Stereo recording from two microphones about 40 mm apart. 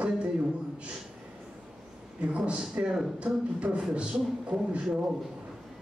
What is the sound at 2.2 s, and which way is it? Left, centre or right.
Speech, right.